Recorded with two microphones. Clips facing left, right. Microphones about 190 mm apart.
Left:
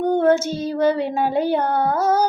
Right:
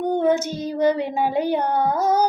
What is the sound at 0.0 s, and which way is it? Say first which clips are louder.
Child singing: left 3 dB; 15° right (ahead or behind).